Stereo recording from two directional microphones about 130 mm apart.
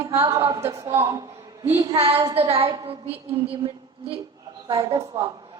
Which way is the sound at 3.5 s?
45° right (ahead or behind).